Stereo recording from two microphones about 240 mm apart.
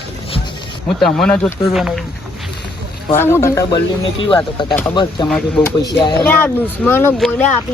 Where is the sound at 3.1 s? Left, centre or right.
Centre.